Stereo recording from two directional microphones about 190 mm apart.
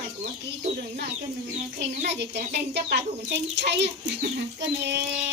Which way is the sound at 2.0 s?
60° right (ahead or behind).